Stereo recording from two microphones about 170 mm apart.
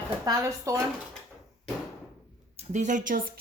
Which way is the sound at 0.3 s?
20° right (ahead or behind).